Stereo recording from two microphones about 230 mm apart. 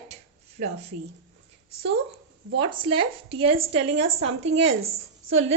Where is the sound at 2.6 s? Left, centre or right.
Right.